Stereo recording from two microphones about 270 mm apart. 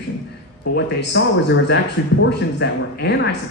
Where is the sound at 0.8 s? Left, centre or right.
Left.